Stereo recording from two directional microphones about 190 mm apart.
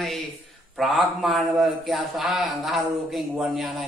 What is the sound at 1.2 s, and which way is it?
A man's voice, centre (ahead or behind).